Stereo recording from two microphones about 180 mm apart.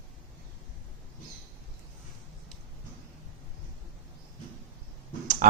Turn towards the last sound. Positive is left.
turn(degrees=-45)  # may be behind; listen again after turning